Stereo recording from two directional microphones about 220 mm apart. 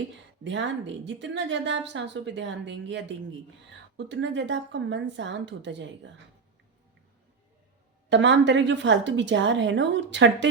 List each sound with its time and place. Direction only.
0.4 s a woman's voice: 55° right (ahead or behind)
8.1 s a woman's voice: 55° right (ahead or behind)